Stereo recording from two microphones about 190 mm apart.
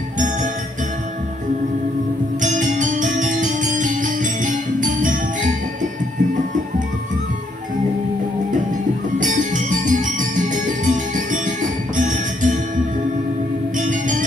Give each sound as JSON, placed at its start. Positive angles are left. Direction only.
{"t": 2.4, "sound": "music", "side_deg": -40}
{"t": 9.2, "sound": "music", "side_deg": -40}
{"t": 13.7, "sound": "music", "side_deg": -40}